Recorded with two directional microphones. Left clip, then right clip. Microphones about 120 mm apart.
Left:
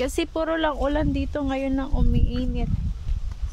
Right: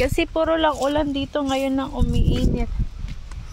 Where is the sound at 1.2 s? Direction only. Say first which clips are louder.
Right 4 dB; 15° left (ahead or behind).